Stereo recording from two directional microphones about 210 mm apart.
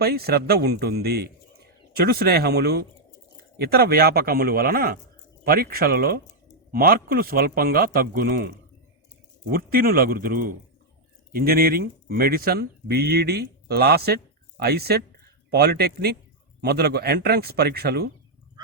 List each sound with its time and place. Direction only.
0.0 s speech: 50° right (ahead or behind)
9.5 s speech: 45° right (ahead or behind)